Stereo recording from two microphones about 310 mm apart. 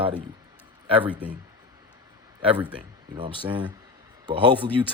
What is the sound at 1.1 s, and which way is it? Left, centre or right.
Speech, centre.